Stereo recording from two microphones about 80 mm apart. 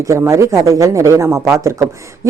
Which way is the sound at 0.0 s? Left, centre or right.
Right.